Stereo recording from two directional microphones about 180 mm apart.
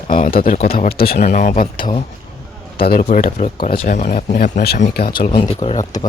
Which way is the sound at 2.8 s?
50° left (ahead or behind).